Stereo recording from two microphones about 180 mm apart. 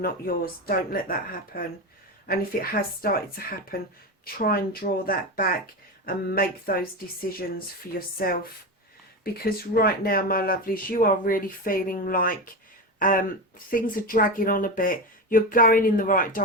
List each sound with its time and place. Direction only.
0.0 s speech: 55° left (ahead or behind)
7.9 s speech: 55° left (ahead or behind)